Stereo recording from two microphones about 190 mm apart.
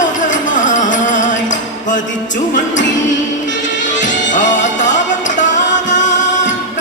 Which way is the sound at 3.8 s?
40° left (ahead or behind).